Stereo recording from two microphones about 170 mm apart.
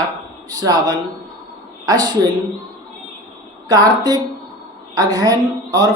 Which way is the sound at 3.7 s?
20° right (ahead or behind).